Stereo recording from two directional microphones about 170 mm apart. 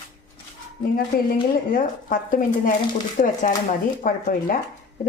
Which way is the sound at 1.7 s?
55° left (ahead or behind).